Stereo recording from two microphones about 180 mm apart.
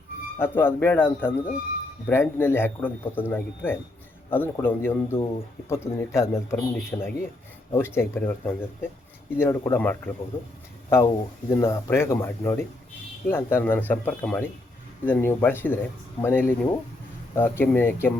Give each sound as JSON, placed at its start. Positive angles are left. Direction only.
{"t": 0.3, "sound": "speech", "side_deg": 10}
{"t": 5.1, "sound": "speech", "side_deg": 30}
{"t": 5.6, "sound": "speech", "side_deg": 15}